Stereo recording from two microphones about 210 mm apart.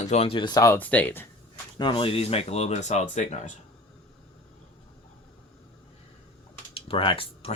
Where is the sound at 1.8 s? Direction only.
25° left (ahead or behind).